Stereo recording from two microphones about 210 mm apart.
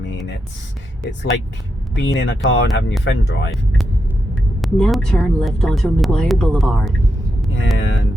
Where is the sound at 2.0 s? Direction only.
60° left (ahead or behind).